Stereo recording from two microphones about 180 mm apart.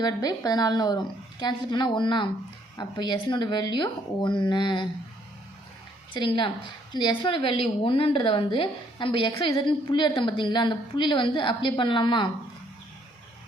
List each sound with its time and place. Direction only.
0.0 s a woman's voice: 20° left (ahead or behind)
6.1 s a woman's voice: 25° left (ahead or behind)